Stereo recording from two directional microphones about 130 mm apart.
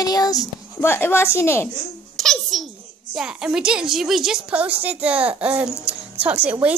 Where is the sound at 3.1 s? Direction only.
5° right (ahead or behind).